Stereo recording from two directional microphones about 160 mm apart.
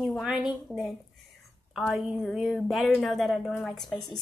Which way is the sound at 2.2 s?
Centre (ahead or behind).